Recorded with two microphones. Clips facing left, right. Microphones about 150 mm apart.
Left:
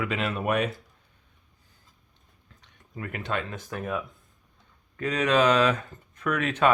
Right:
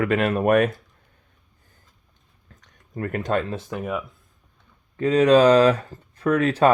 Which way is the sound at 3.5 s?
25° right (ahead or behind).